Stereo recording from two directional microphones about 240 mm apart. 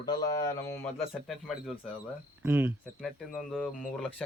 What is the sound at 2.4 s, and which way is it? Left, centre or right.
Speech, centre.